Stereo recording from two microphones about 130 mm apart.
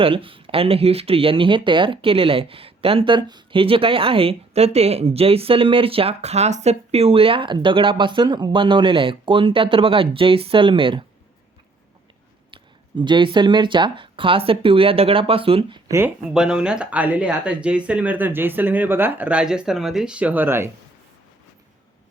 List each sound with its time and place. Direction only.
0.0 s speech: 45° right (ahead or behind)
12.5 s speech: 40° right (ahead or behind)
15.9 s speech: 20° right (ahead or behind)
16.3 s speech: 5° right (ahead or behind)